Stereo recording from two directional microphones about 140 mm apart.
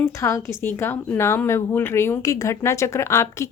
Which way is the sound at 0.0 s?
20° left (ahead or behind).